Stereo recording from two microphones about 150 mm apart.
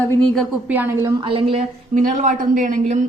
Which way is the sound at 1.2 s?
35° right (ahead or behind).